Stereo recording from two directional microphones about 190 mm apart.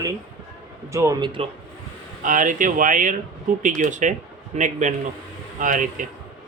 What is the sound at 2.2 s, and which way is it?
Speech, 45° right (ahead or behind).